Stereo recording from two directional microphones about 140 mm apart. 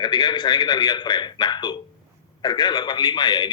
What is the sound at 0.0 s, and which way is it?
Speech, 30° left (ahead or behind).